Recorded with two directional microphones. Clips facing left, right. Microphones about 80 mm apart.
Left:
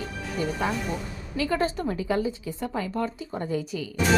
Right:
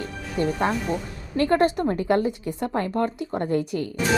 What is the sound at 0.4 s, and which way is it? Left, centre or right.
Speech, right.